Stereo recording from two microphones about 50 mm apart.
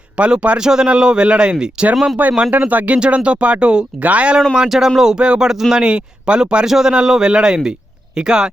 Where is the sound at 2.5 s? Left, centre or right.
Right.